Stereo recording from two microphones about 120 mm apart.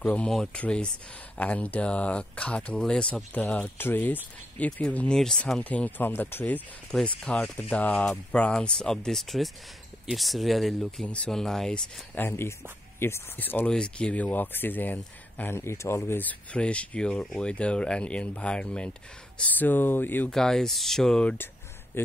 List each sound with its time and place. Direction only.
0.0 s speech: 15° left (ahead or behind)
12.2 s speech: 20° left (ahead or behind)
20.3 s speech: 5° left (ahead or behind)